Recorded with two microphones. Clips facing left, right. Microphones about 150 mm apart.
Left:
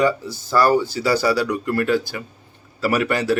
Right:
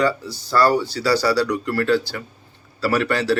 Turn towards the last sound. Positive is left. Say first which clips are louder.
# even
turn(degrees=15)  # may be behind; listen again after turning